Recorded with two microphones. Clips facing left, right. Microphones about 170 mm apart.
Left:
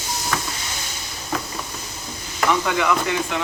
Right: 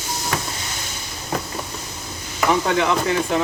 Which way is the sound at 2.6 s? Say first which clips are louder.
Right 2 dB; 30° right (ahead or behind).